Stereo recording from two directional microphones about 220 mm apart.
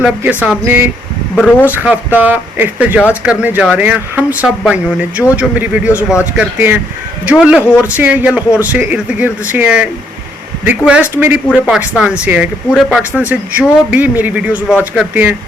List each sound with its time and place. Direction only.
0.0 s speech: 5° right (ahead or behind)